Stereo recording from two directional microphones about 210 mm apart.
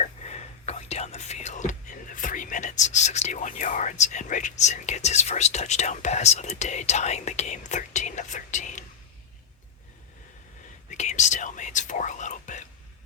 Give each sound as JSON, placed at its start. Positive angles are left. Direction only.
{"t": 0.0, "sound": "speech", "side_deg": 30}
{"t": 10.9, "sound": "speech", "side_deg": 35}